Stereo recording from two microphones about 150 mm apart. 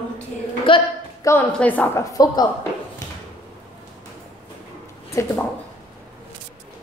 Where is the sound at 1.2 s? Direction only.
15° left (ahead or behind).